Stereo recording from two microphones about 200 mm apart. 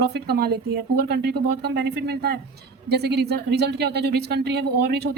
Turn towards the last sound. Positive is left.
turn(degrees=-55)  # may be behind; listen again after turning